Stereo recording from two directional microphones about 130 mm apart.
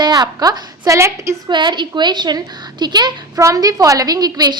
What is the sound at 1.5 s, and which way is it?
A woman's voice, 35° right (ahead or behind).